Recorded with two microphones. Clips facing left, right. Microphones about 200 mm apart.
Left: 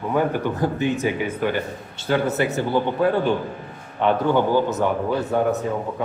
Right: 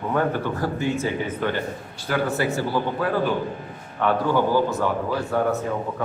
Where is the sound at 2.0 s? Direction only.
25° left (ahead or behind).